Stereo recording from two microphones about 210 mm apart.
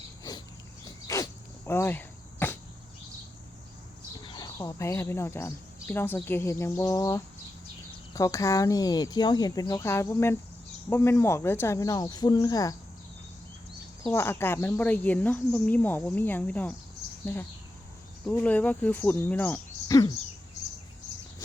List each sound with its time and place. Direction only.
1.0 s cricket: 15° left (ahead or behind)
4.2 s speech: 20° left (ahead or behind)
14.1 s speech: 10° left (ahead or behind)
18.3 s speech: 5° left (ahead or behind)